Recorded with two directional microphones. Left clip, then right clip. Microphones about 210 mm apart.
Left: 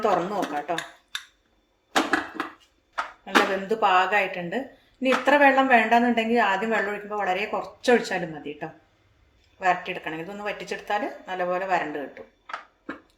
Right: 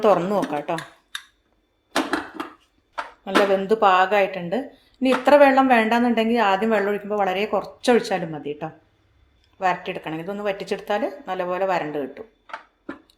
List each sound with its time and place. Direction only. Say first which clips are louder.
0.0 s speech: right 5 dB; 40° right (ahead or behind)
3.2 s speech: right 4 dB; 35° right (ahead or behind)